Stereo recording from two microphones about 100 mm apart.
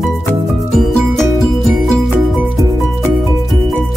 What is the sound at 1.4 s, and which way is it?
Music, centre (ahead or behind).